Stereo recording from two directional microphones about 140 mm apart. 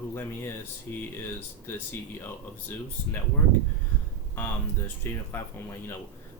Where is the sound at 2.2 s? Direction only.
15° left (ahead or behind).